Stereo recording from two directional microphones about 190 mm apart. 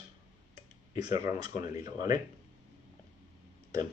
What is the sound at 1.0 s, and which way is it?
Speech, 20° right (ahead or behind).